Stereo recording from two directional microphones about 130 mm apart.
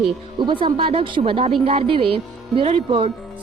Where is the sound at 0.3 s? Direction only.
35° right (ahead or behind).